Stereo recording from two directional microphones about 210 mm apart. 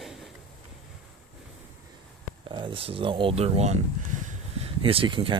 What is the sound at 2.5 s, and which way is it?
Speech, 25° right (ahead or behind).